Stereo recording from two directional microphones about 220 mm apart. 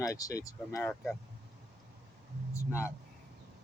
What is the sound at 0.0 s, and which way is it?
Speech, 15° left (ahead or behind).